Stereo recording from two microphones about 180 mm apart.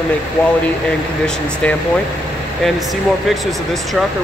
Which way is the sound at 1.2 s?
10° left (ahead or behind).